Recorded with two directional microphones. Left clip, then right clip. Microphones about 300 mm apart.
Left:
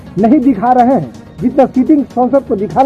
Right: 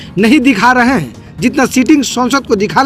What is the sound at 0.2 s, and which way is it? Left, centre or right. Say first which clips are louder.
Speech: right 2 dB; centre.